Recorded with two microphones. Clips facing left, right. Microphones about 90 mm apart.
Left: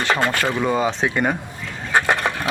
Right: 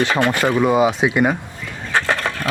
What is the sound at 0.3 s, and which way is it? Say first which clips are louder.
Speech: right 4 dB; 15° right (ahead or behind).